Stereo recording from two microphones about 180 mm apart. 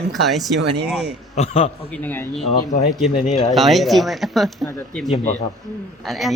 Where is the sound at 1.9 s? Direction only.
10° left (ahead or behind).